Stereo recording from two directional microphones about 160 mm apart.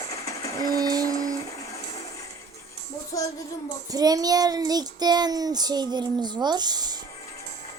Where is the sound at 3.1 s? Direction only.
20° left (ahead or behind).